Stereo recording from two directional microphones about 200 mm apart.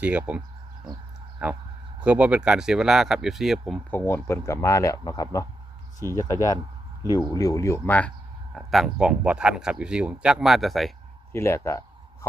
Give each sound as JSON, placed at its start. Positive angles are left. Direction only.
{"t": 0.0, "sound": "speech", "side_deg": -5}
{"t": 3.9, "sound": "speech", "side_deg": 15}
{"t": 11.3, "sound": "speech", "side_deg": 15}